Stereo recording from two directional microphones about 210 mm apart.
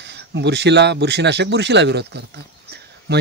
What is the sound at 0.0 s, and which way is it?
Speech, 55° right (ahead or behind).